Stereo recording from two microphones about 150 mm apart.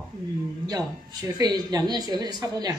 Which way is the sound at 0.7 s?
25° right (ahead or behind).